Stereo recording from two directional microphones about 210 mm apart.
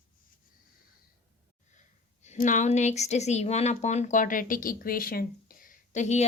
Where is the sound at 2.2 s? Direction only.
35° left (ahead or behind).